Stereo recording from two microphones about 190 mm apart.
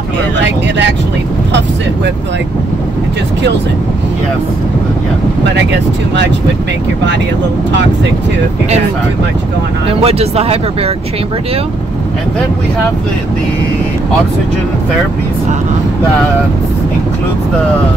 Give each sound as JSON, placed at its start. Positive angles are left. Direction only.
{"t": 10.0, "sound": "speech", "side_deg": -30}